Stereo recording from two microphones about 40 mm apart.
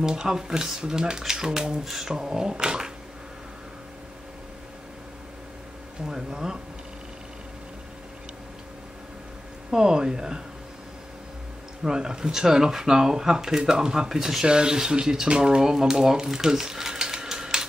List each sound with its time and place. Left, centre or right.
0.0 s speech: centre
6.0 s speech: centre
9.7 s speech: centre
11.8 s speech: centre